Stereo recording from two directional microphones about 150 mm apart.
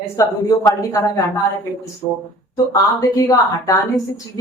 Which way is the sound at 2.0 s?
25° left (ahead or behind).